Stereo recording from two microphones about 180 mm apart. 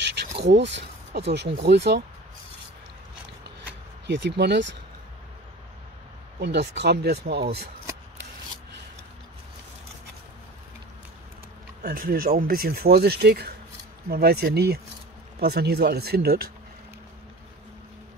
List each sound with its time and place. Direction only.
0.4 s speech: 75° right (ahead or behind)
4.1 s speech: 75° right (ahead or behind)
6.4 s speech: 70° right (ahead or behind)
11.8 s speech: 55° right (ahead or behind)